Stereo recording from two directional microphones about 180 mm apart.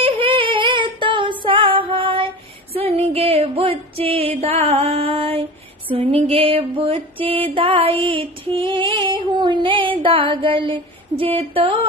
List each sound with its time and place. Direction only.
0.0 s female singing: 30° right (ahead or behind)
4.4 s music: 35° right (ahead or behind)